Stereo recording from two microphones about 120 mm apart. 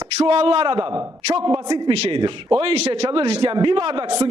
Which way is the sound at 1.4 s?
60° right (ahead or behind).